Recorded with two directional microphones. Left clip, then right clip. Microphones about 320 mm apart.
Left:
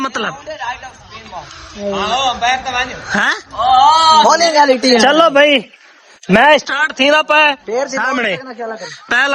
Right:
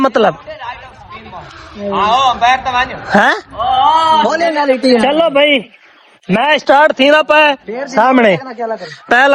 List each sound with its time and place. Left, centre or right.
0.0 s speech: centre
0.4 s a sound: left
2.0 s a man's voice: centre
3.0 s speech: centre
3.6 s a man's voice: centre
4.6 s a woman's voice: left
5.0 s a man's voice: centre
6.2 s a woman's voice: left
6.9 s speech: centre
7.7 s a woman's voice: left
8.1 s a man's voice: centre
9.0 s speech: centre